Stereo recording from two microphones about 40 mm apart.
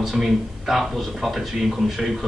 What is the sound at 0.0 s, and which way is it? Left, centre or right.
Speech, centre.